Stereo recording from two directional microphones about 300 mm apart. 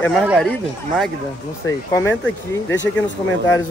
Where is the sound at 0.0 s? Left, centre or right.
Centre.